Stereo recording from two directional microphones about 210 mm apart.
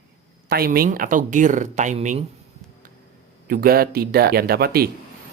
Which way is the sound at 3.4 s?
45° right (ahead or behind).